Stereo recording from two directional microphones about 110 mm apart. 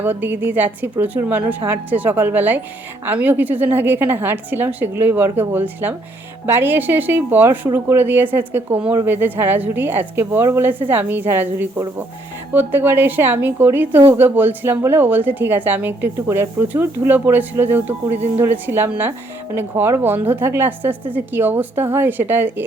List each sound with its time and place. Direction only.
0.0 s a woman's voice: 20° right (ahead or behind)